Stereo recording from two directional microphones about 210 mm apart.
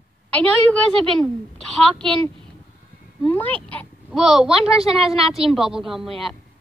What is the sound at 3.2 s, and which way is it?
A child's voice, 10° left (ahead or behind).